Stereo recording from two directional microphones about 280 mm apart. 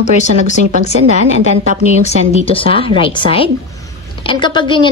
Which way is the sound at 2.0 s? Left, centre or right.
Centre.